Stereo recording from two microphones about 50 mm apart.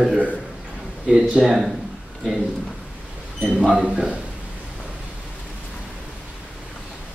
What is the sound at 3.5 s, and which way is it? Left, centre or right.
Speech, centre.